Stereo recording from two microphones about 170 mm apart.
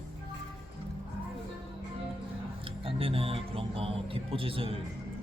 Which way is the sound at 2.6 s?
35° right (ahead or behind).